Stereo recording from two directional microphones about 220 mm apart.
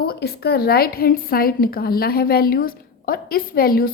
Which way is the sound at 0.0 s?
45° left (ahead or behind).